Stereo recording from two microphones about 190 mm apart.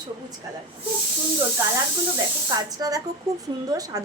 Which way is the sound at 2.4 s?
20° right (ahead or behind).